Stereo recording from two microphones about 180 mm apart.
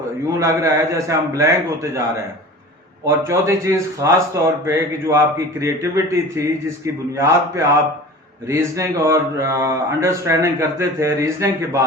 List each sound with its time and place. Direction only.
0.3 s a man's voice: 15° right (ahead or behind)